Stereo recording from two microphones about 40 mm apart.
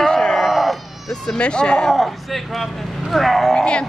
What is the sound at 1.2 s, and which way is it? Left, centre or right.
Speech, left.